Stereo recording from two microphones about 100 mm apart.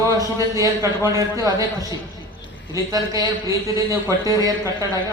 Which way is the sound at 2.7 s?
35° right (ahead or behind).